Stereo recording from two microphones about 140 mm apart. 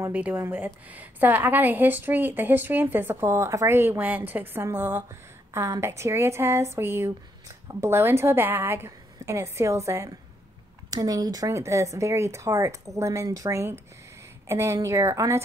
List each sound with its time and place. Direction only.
0.0 s a woman's voice: 10° right (ahead or behind)